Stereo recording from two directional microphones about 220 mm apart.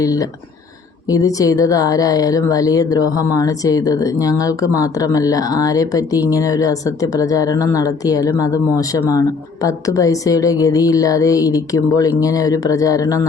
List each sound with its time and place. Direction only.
0.0 s speech: 15° left (ahead or behind)